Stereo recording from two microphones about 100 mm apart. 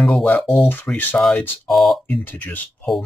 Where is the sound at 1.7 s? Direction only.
Centre (ahead or behind).